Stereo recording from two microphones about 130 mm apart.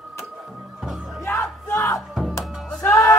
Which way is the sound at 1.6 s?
20° left (ahead or behind).